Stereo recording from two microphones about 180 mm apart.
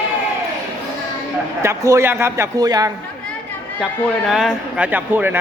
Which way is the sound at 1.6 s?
15° right (ahead or behind).